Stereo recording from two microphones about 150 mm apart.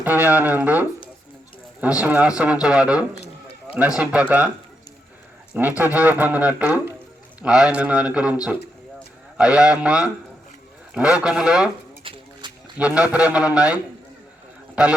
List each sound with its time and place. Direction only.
0.0 s speech: 10° right (ahead or behind)
5.5 s speech: 10° right (ahead or behind)
9.4 s speech: 5° right (ahead or behind)
12.0 s a sound: 35° right (ahead or behind)
12.7 s speech: 5° right (ahead or behind)